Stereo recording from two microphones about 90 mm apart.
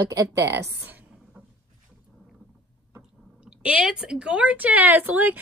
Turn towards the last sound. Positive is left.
turn(degrees=-20)  # may be behind; listen again after turning